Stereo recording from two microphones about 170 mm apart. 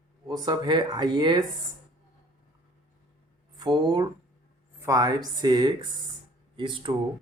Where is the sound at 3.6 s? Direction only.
25° right (ahead or behind).